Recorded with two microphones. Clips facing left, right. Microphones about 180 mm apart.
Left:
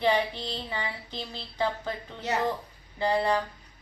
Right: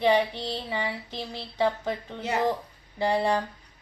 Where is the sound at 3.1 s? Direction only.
25° right (ahead or behind).